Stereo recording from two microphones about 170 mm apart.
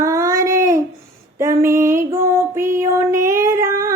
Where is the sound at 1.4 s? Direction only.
15° right (ahead or behind).